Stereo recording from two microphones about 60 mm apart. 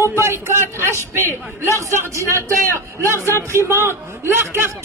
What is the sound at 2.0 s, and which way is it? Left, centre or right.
A man's voice, right.